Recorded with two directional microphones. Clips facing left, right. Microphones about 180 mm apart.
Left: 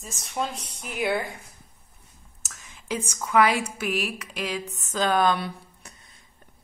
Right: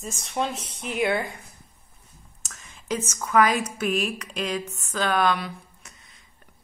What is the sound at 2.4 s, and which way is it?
Whispering, 10° left (ahead or behind).